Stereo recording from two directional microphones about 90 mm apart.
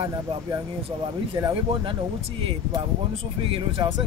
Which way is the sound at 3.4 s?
85° right.